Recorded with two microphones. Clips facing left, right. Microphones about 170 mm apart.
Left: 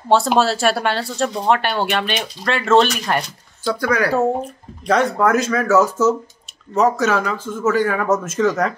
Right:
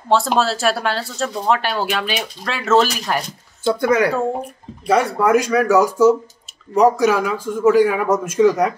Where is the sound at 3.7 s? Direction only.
20° right (ahead or behind).